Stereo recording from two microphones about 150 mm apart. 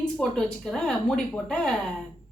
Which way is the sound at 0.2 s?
5° left (ahead or behind).